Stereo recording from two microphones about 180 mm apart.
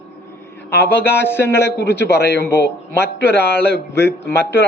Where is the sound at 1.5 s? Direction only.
70° left (ahead or behind).